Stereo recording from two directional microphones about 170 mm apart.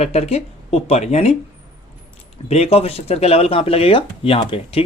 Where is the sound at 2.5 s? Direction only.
35° left (ahead or behind).